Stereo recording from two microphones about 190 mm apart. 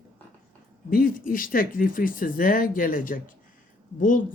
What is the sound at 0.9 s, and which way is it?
Speech, 45° left (ahead or behind).